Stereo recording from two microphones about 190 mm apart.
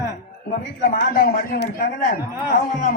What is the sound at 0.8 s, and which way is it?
Speech, 50° left (ahead or behind).